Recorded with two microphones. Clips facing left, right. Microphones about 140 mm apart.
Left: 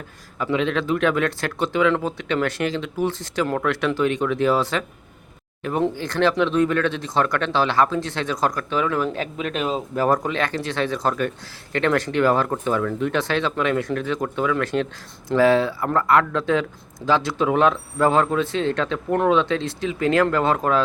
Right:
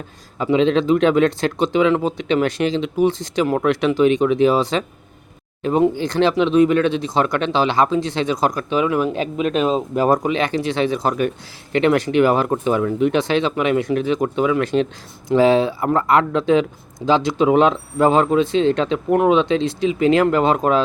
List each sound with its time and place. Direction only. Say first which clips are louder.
0.3 s speech: right 6 dB; 25° right (ahead or behind)